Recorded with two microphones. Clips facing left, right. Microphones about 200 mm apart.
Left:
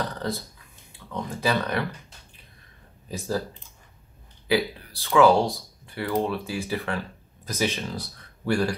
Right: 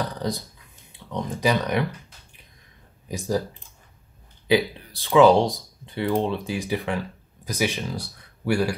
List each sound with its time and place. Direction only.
0.1 s a sound: 15° right (ahead or behind)
0.9 s speech: 15° right (ahead or behind)
3.1 s speech: 15° right (ahead or behind)
4.5 s speech: 15° right (ahead or behind)